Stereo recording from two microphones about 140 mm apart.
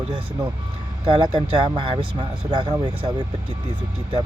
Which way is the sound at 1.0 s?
35° right (ahead or behind).